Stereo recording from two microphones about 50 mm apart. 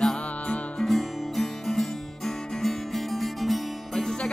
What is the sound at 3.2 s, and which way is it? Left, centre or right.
Music, centre.